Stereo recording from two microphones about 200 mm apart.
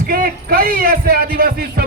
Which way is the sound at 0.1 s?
45° right (ahead or behind).